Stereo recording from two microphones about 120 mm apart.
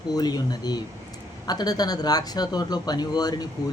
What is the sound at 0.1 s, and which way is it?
Speech, 35° left (ahead or behind).